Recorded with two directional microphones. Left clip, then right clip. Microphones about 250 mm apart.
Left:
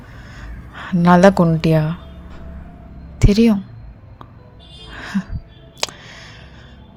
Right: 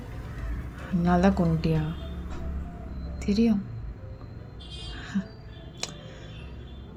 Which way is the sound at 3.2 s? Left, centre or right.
Left.